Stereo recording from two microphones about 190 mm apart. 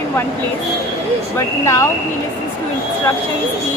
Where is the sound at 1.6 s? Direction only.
15° left (ahead or behind).